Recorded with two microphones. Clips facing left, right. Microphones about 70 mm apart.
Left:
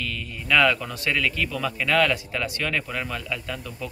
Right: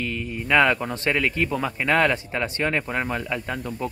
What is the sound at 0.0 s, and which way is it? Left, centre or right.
A man's voice, right.